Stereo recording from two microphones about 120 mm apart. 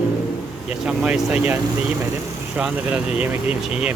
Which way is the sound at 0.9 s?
10° right (ahead or behind).